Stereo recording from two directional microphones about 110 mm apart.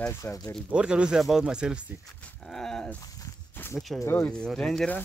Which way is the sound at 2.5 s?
5° left (ahead or behind).